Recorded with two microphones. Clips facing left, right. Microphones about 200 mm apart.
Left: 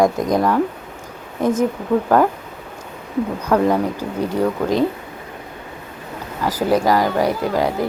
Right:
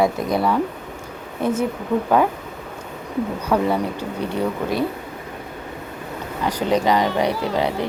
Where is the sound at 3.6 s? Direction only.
15° left (ahead or behind).